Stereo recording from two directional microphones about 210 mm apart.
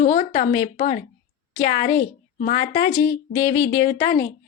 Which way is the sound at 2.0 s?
45° left (ahead or behind).